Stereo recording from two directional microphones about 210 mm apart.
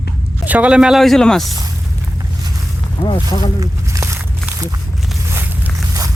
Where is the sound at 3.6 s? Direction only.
15° right (ahead or behind).